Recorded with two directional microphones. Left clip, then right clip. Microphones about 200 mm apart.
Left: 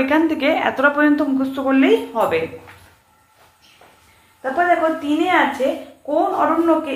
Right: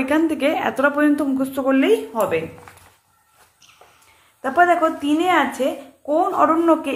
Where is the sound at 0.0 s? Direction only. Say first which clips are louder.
Left 2 dB; 30° right (ahead or behind).